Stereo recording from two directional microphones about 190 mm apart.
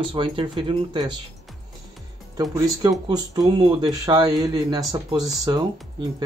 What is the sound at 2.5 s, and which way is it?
Speech, 20° right (ahead or behind).